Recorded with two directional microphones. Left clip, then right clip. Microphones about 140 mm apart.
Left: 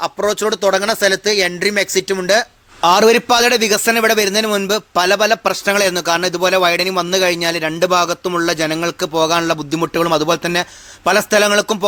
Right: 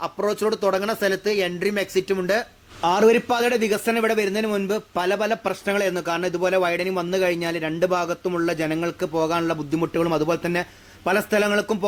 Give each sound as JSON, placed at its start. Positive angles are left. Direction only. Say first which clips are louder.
{"t": 0.0, "sound": "speech", "louder": "left 6 dB", "side_deg": 10}
{"t": 2.8, "sound": "a man's voice", "louder": "left 7 dB", "side_deg": 25}